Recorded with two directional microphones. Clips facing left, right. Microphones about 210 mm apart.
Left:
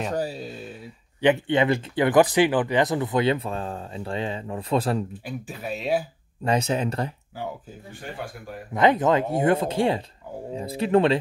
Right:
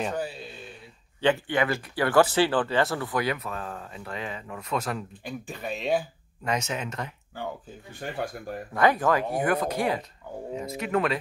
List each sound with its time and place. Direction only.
0.1 s a sound: 40° left (ahead or behind)
1.2 s speech: 20° left (ahead or behind)
5.2 s speech: 5° left (ahead or behind)
6.4 s speech: 30° left (ahead or behind)
8.7 s speech: 20° left (ahead or behind)